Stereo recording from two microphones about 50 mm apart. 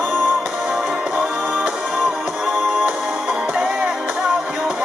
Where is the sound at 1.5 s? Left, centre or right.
Right.